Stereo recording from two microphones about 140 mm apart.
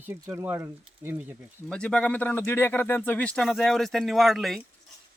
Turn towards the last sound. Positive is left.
turn(degrees=0)  # may be behind; listen again after turning